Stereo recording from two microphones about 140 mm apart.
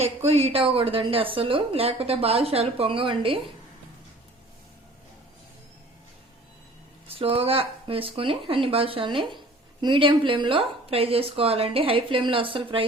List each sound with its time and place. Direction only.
0.0 s a woman's voice: 45° right (ahead or behind)
7.1 s a woman's voice: 40° right (ahead or behind)